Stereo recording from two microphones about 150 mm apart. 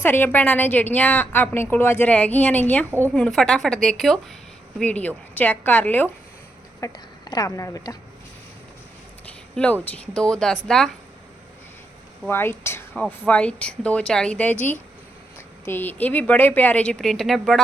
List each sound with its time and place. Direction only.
0.0 s a woman's voice: 15° left (ahead or behind)
6.7 s speech: 25° left (ahead or behind)
9.8 s a woman's voice: 5° left (ahead or behind)
12.3 s a woman's voice: 15° left (ahead or behind)